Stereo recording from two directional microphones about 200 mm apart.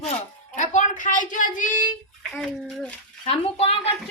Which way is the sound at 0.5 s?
35° left (ahead or behind).